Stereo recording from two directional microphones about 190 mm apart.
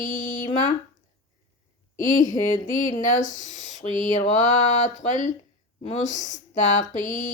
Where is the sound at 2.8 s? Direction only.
45° left (ahead or behind).